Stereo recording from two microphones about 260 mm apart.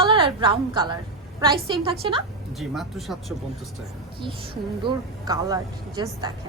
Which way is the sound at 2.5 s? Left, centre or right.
Centre.